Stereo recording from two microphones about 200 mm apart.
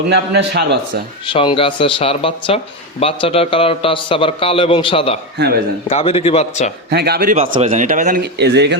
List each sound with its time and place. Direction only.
0.1 s a man's voice: 55° right (ahead or behind)
1.3 s a man's voice: 25° left (ahead or behind)
6.9 s speech: 50° right (ahead or behind)
7.4 s speech: 25° right (ahead or behind)
8.2 s a man's voice: 55° right (ahead or behind)